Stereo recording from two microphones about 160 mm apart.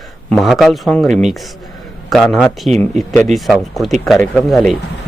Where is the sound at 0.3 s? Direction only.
Centre (ahead or behind).